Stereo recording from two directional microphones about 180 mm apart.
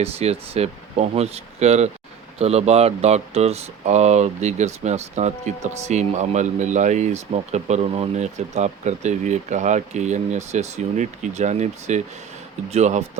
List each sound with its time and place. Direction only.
0.0 s speech: 35° right (ahead or behind)